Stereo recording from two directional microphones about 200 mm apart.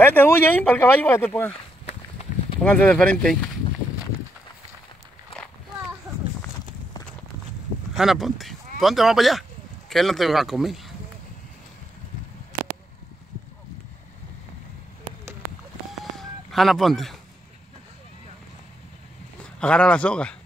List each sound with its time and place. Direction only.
0.0 s speech: 10° left (ahead or behind)
1.5 s a sound: 30° left (ahead or behind)
2.6 s speech: 5° left (ahead or behind)
7.9 s speech: centre (ahead or behind)
16.0 s a sound: centre (ahead or behind)
19.4 s speech: 5° left (ahead or behind)